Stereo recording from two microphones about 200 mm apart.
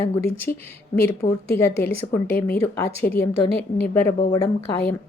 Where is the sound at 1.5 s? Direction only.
10° left (ahead or behind).